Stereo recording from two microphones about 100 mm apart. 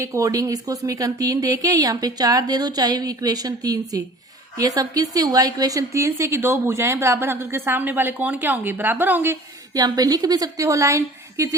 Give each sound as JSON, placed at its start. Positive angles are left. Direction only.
{"t": 0.0, "sound": "a woman's voice", "side_deg": -30}
{"t": 9.7, "sound": "speech", "side_deg": -40}